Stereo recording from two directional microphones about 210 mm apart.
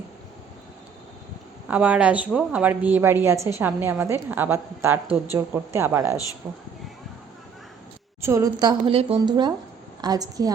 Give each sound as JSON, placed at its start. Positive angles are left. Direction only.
{"t": 1.6, "sound": "a woman's voice", "side_deg": -5}
{"t": 8.2, "sound": "a woman's voice", "side_deg": -15}